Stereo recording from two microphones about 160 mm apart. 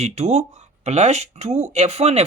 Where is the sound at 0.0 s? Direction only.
45° right (ahead or behind).